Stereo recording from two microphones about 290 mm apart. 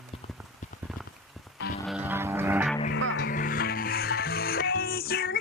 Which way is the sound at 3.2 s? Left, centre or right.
Left.